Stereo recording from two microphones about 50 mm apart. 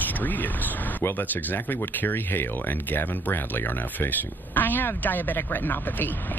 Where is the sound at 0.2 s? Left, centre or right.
Left.